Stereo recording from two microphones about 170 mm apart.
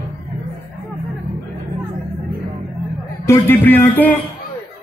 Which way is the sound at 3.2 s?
15° left (ahead or behind).